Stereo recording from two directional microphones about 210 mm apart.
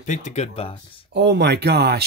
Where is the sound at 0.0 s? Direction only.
35° left (ahead or behind).